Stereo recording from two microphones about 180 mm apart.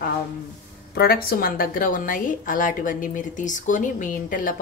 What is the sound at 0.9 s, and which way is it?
A woman's voice, 55° left (ahead or behind).